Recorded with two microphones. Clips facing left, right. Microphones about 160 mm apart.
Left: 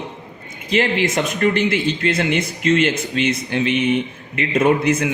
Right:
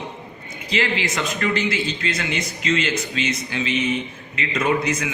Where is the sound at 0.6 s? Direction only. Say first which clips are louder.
Left 5 dB; 50° left (ahead or behind).